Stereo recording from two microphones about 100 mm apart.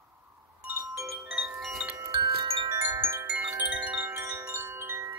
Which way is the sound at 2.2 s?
65° right (ahead or behind).